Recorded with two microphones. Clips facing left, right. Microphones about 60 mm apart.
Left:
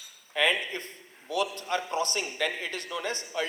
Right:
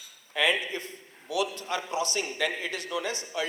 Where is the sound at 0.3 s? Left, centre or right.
Left.